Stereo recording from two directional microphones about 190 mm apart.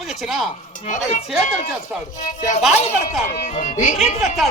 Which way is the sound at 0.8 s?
40° left (ahead or behind).